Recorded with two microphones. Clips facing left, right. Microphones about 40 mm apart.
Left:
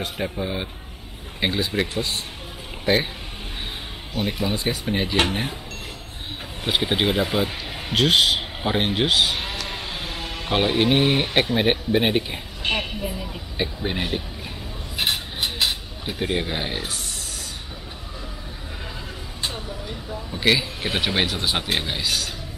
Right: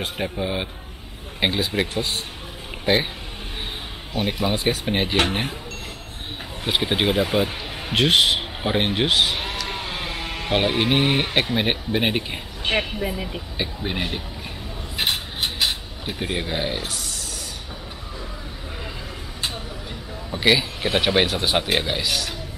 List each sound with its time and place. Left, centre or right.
0.0 s a man's voice: centre
4.1 s speech: right
4.8 s speech: right
5.1 s speech: right
6.6 s speech: centre
8.0 s speech: centre
9.8 s a sound: centre
10.5 s speech: centre
11.5 s speech: centre
12.6 s speech: right
13.6 s speech: centre
15.6 s speech: centre
20.4 s speech: centre